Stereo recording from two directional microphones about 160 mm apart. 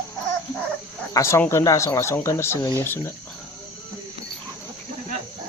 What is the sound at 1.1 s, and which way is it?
Speech, 15° left (ahead or behind).